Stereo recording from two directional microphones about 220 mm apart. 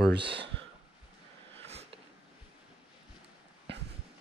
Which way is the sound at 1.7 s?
30° right (ahead or behind).